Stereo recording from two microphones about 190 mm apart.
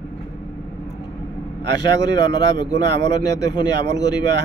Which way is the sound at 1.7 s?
20° left (ahead or behind).